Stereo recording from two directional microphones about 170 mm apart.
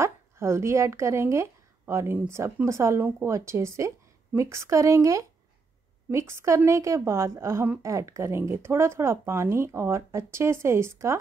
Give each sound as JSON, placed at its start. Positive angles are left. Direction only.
{"t": 0.0, "sound": "a woman's voice", "side_deg": -15}